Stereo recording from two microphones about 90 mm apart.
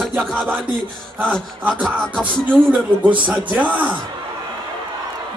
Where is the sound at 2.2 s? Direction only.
20° right (ahead or behind).